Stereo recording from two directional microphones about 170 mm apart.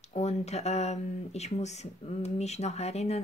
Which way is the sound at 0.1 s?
40° left (ahead or behind).